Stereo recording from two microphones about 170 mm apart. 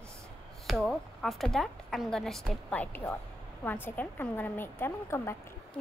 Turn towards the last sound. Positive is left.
turn(degrees=15)  # may be behind; listen again after turning